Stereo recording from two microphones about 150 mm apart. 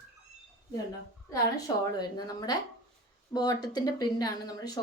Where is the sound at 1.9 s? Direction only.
25° left (ahead or behind).